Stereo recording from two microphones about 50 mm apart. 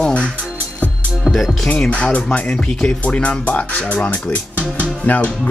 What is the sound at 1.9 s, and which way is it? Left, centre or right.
Speech, left.